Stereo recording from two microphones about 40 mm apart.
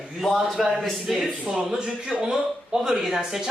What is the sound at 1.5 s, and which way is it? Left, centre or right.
Speech, right.